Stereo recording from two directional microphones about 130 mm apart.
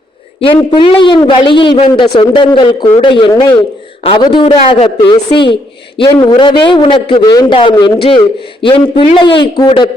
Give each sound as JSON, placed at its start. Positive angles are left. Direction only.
{"t": 0.3, "sound": "a man's voice", "side_deg": 40}